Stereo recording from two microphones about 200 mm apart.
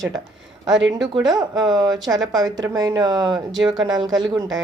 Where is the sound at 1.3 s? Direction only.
20° right (ahead or behind).